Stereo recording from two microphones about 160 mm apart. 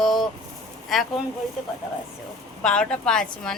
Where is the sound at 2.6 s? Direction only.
5° left (ahead or behind).